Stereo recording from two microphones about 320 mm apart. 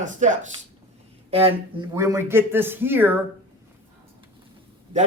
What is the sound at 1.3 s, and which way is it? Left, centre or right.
Speech, centre.